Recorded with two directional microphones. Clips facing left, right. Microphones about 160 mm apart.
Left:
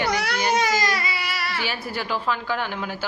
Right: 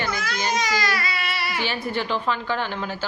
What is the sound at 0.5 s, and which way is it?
Speech, 50° left (ahead or behind).